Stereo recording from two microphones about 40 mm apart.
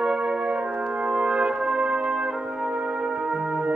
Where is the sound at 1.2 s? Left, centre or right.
Right.